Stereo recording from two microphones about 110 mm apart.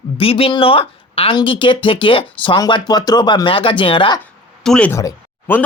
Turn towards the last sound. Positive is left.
turn(degrees=25)  # may be behind; listen again after turning